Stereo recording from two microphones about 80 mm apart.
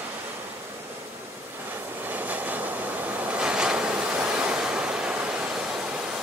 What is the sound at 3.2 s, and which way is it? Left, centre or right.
Waves, centre.